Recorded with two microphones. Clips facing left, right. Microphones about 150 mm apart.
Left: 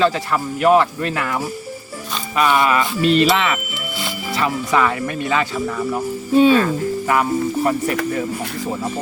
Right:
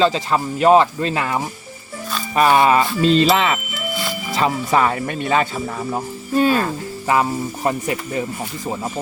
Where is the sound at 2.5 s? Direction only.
30° right (ahead or behind).